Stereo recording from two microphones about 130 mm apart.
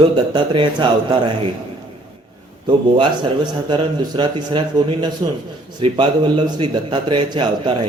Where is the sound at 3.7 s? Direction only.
35° right (ahead or behind).